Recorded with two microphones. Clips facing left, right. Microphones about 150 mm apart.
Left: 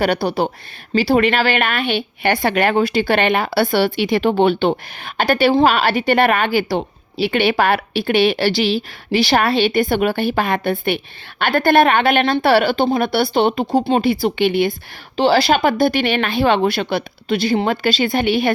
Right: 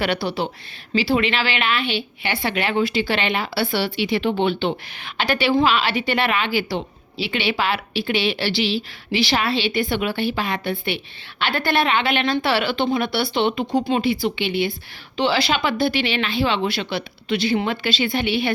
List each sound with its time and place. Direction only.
0.0 s a woman's voice: 45° left (ahead or behind)